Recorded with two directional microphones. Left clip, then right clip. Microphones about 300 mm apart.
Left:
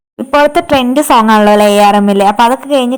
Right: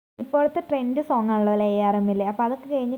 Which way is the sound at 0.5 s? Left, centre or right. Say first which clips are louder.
Left 15 dB; centre.